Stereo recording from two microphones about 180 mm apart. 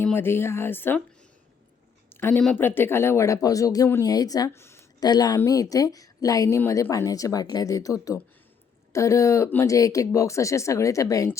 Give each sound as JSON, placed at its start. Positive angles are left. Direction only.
{"t": 0.0, "sound": "speech", "side_deg": 10}
{"t": 2.0, "sound": "speech", "side_deg": 10}